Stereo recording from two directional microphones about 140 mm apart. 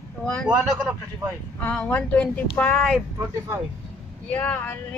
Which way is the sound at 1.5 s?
10° left (ahead or behind).